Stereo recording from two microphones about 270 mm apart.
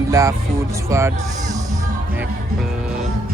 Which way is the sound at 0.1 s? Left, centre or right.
Centre.